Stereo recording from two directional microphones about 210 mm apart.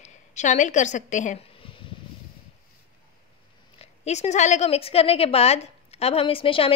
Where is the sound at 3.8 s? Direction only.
30° left (ahead or behind).